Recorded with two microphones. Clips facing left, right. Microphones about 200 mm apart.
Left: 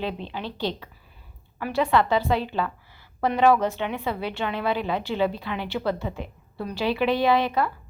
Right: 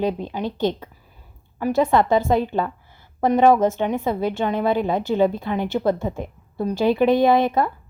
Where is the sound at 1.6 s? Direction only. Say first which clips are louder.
Right 4 dB; 45° right (ahead or behind).